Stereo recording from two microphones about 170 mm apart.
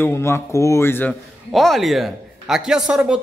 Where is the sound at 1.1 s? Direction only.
Centre (ahead or behind).